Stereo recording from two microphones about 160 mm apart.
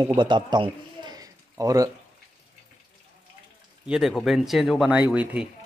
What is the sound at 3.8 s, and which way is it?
Speech, 5° right (ahead or behind).